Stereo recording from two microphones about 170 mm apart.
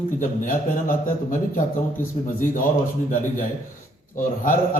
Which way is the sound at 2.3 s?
50° left (ahead or behind).